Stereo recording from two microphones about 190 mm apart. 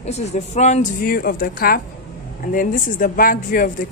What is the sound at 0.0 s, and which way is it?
A woman's voice, 35° left (ahead or behind).